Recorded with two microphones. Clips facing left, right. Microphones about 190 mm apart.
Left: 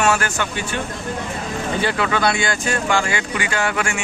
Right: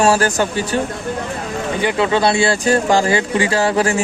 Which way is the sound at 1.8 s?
20° right (ahead or behind).